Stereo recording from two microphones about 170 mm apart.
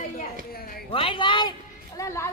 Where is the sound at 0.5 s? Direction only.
60° left (ahead or behind).